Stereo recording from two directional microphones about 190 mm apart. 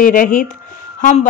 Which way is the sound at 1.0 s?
35° left (ahead or behind).